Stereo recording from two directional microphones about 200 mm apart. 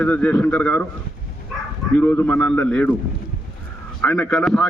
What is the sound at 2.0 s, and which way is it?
Speech, 10° left (ahead or behind).